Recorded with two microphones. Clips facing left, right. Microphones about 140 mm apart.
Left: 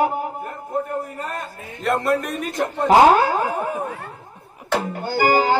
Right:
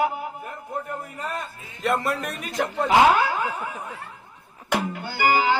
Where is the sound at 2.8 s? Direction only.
40° left (ahead or behind).